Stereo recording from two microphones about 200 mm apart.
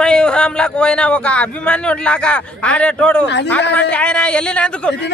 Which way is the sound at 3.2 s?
60° left (ahead or behind).